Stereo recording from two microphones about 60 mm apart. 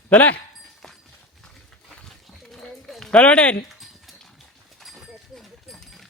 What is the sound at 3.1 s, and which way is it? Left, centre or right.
Speech, left.